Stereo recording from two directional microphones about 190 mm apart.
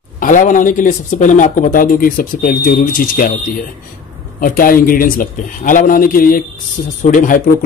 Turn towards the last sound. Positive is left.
turn(degrees=45)  # may be behind; listen again after turning